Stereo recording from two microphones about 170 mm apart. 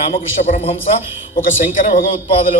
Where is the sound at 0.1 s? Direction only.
45° left (ahead or behind).